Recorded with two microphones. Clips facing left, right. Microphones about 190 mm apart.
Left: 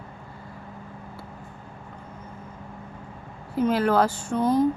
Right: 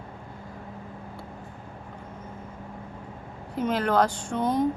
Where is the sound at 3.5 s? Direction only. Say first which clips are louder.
Left 3 dB; 5° left (ahead or behind).